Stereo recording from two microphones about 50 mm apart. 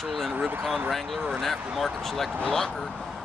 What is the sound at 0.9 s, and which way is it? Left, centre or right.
Speech, centre.